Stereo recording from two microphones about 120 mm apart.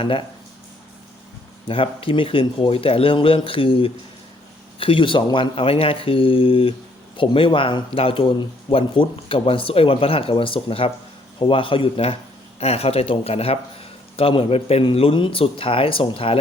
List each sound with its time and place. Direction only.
1.6 s speech: 50° left (ahead or behind)